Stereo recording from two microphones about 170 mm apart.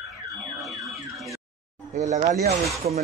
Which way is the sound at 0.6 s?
Centre (ahead or behind).